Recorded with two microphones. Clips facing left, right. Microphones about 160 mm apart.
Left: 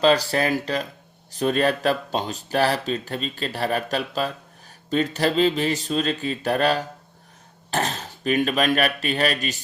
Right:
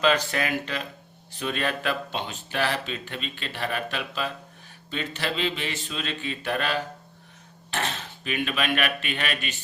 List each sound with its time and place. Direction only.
0.0 s speech: 35° left (ahead or behind)